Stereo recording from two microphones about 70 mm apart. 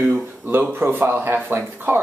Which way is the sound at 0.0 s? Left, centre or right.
Right.